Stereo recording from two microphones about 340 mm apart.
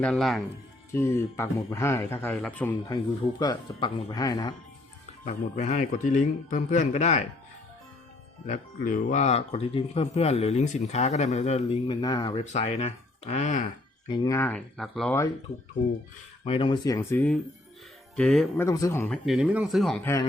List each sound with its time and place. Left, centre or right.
0.0 s speech: centre
5.2 s speech: left
8.4 s speech: left; by 15.3 s centre
15.8 s speech: left; by 20.2 s centre